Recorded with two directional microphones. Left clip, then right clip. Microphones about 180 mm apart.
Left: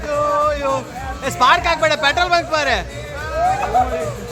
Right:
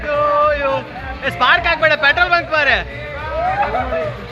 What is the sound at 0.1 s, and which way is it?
Music, 25° left (ahead or behind).